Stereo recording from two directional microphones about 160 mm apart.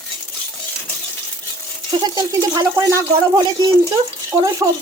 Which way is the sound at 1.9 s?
25° right (ahead or behind).